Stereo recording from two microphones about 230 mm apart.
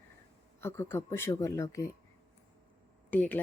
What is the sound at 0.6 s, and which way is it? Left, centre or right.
Speech, centre.